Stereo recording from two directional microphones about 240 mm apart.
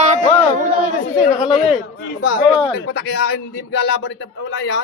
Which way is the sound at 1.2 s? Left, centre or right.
Left.